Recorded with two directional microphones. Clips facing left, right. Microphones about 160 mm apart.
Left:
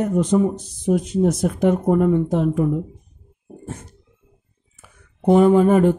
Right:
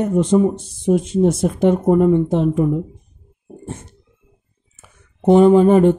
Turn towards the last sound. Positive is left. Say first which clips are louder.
# right 3 dB
turn(degrees=-25)  # may be behind; listen again after turning